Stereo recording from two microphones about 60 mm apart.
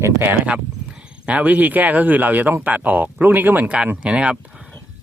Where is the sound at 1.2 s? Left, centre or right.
Right.